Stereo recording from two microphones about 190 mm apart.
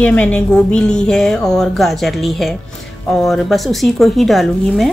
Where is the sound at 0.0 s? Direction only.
5° left (ahead or behind).